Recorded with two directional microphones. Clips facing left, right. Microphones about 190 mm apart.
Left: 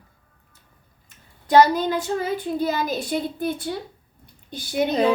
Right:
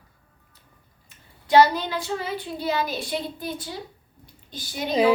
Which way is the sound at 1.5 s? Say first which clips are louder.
Left 2 dB; 45° left (ahead or behind).